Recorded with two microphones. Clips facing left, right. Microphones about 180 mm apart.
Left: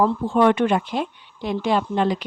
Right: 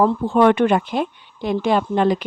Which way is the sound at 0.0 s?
60° right (ahead or behind).